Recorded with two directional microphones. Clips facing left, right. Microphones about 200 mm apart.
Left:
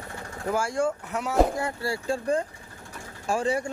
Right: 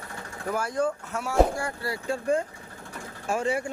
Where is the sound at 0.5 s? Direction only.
25° left (ahead or behind).